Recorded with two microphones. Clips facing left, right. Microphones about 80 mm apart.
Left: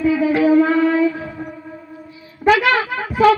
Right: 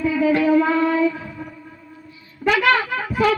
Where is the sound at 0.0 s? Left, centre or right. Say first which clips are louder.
Left 2 dB; centre.